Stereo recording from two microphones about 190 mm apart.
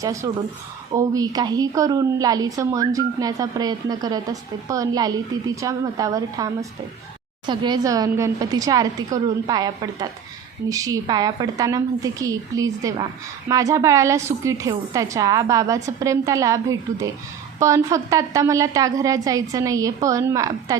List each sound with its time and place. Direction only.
0.0 s a woman's voice: 15° right (ahead or behind)